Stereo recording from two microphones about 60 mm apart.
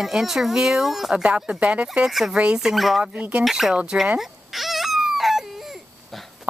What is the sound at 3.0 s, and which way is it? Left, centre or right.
Speech, centre.